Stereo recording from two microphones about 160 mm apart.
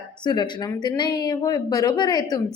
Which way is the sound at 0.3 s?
25° left (ahead or behind).